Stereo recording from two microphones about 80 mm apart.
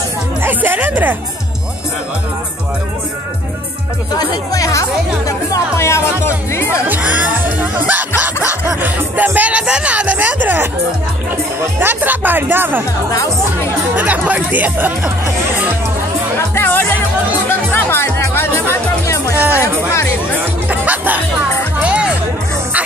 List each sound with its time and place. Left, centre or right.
0.4 s music: right
4.1 s speech: left
5.5 s music: left
7.0 s music: centre
8.8 s speech: right
11.8 s speech: right
13.9 s speech: centre
16.3 s music: left
19.3 s speech: right
20.6 s music: centre